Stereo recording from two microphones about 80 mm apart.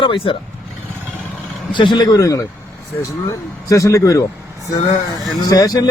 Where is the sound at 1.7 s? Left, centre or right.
Left.